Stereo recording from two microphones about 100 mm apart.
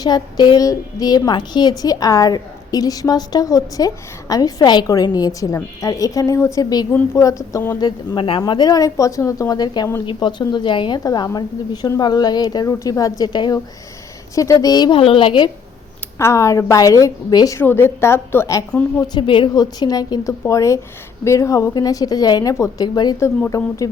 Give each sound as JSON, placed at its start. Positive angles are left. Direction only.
{"t": 0.0, "sound": "a woman's voice", "side_deg": 45}
{"t": 7.8, "sound": "a woman's voice", "side_deg": 50}
{"t": 14.3, "sound": "a woman's voice", "side_deg": 35}
{"t": 14.9, "sound": "a woman's voice", "side_deg": 60}
{"t": 16.1, "sound": "a woman's voice", "side_deg": 30}
{"t": 17.6, "sound": "a woman's voice", "side_deg": 20}
{"t": 18.9, "sound": "a woman's voice", "side_deg": 45}
{"t": 19.2, "sound": "a woman's voice", "side_deg": 55}
{"t": 19.5, "sound": "a woman's voice", "side_deg": 40}